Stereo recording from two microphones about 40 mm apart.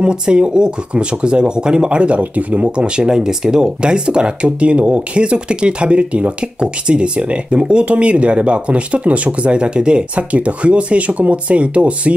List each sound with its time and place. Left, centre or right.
0.0 s speech: right
2.6 s speech: right
10.1 s speech: right